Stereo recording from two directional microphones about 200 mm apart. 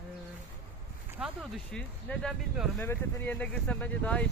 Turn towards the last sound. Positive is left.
turn(degrees=5)  # may be behind; listen again after turning